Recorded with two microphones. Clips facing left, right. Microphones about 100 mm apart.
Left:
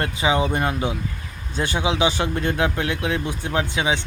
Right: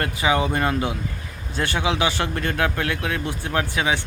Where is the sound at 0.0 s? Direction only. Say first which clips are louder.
Even; 20° left (ahead or behind).